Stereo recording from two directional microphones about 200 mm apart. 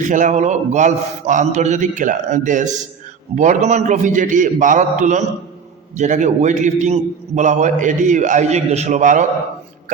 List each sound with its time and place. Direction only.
0.0 s a man's voice: 40° right (ahead or behind)